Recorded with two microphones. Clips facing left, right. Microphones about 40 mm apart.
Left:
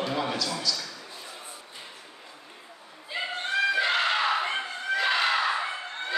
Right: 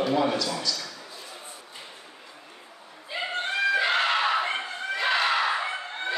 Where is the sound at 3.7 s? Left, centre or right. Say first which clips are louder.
Right 1 dB; centre.